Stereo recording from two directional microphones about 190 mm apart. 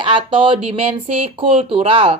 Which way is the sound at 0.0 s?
25° right (ahead or behind).